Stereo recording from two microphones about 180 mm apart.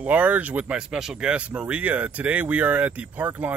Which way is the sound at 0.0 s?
10° right (ahead or behind).